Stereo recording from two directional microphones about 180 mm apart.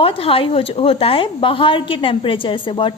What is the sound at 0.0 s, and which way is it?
Speech, 30° left (ahead or behind).